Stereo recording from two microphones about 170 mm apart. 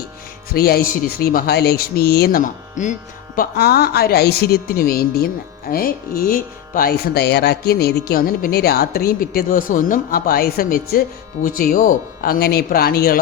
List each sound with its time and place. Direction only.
0.5 s speech: 65° left (ahead or behind)
3.3 s speech: 65° left (ahead or behind)